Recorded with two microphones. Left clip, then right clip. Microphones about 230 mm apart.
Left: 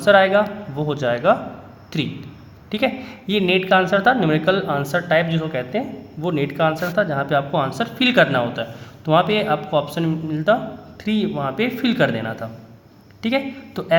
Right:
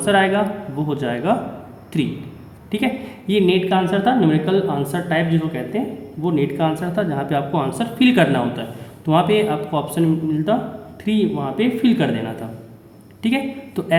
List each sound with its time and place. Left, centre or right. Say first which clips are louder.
0.0 s a woman's voice: left 3 dB; left